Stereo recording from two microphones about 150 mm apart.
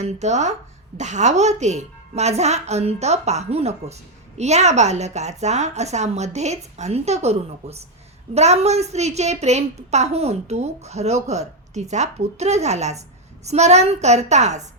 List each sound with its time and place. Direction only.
0.0 s a woman's voice: 50° right (ahead or behind)